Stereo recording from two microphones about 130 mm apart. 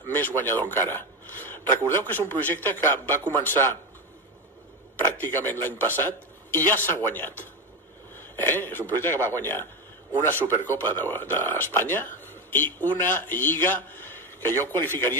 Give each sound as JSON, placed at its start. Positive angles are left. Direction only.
{"t": 0.1, "sound": "speech", "side_deg": 15}
{"t": 5.2, "sound": "speech", "side_deg": 15}